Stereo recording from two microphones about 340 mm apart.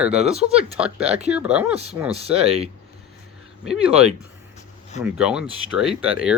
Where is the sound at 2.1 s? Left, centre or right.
Centre.